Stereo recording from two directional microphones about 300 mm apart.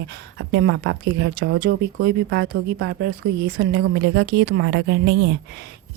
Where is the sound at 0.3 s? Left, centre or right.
Right.